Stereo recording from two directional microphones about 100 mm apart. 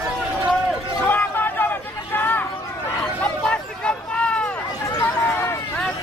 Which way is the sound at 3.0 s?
10° left (ahead or behind).